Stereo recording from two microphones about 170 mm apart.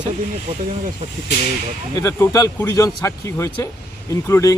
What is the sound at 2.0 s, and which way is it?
Speech, 15° left (ahead or behind).